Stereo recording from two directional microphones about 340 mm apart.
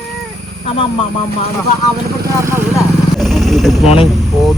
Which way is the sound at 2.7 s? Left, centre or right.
Centre.